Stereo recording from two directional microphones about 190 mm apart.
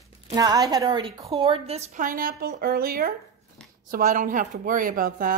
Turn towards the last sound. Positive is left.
turn(degrees=-45)  # may be behind; listen again after turning